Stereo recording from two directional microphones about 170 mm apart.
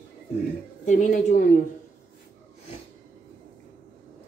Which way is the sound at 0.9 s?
45° left (ahead or behind).